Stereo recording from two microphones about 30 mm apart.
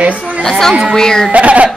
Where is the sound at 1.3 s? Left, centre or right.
Right.